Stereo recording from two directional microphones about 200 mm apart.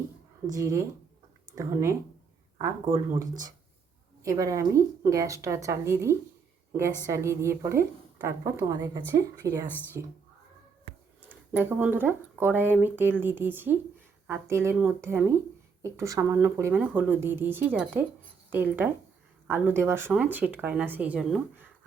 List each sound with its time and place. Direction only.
0.4 s speech: 15° right (ahead or behind)
9.6 s speech: 10° left (ahead or behind)
11.5 s speech: 10° right (ahead or behind)